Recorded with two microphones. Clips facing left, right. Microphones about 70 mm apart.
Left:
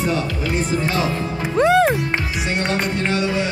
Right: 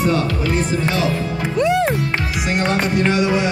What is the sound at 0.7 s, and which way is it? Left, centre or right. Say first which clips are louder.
Speech: right 1 dB; left.